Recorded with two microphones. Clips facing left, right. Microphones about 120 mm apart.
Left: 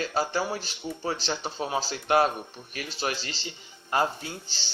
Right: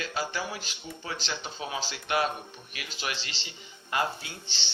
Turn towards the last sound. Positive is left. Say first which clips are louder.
# left 4 dB
turn(degrees=40)  # may be behind; listen again after turning